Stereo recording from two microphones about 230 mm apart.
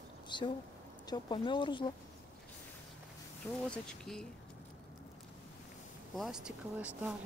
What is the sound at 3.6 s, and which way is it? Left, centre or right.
Speech, centre.